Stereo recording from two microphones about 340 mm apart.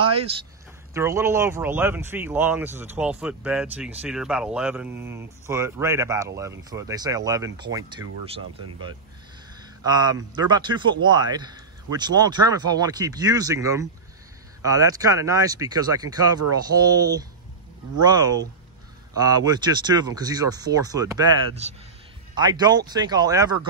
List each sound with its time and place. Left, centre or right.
0.0 s a sound: centre
0.9 s speech: centre
9.8 s speech: centre